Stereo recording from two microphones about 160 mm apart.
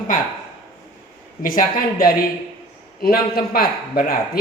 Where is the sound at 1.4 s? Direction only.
60° left (ahead or behind).